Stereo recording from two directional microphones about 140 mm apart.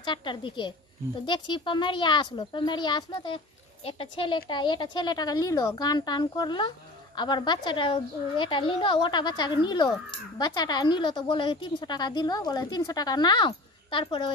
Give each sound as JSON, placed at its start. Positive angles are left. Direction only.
{"t": 0.0, "sound": "a woman's voice", "side_deg": 35}